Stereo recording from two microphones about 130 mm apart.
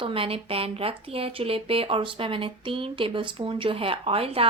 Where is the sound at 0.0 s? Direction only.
45° right (ahead or behind).